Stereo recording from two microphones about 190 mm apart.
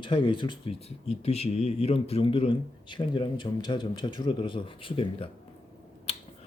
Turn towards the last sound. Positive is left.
turn(degrees=30)  # may be behind; listen again after turning